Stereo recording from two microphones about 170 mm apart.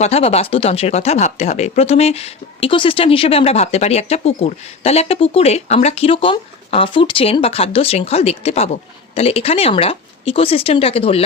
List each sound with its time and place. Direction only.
0.0 s speech: 35° left (ahead or behind)